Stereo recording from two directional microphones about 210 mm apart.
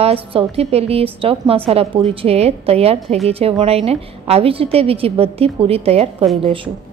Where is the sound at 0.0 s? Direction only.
25° right (ahead or behind).